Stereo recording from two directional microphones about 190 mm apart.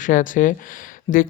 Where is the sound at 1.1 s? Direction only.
30° left (ahead or behind).